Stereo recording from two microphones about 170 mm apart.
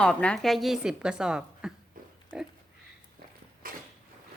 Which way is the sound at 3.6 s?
55° right (ahead or behind).